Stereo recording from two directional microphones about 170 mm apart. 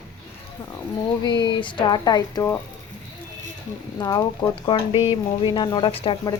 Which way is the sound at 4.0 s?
20° left (ahead or behind).